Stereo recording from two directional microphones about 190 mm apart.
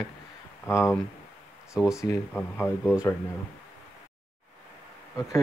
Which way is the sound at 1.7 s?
5° right (ahead or behind).